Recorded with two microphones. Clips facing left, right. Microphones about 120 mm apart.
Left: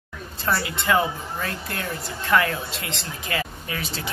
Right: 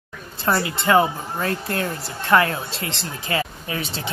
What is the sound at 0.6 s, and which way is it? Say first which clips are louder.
Speech: right 5 dB; 30° right (ahead or behind).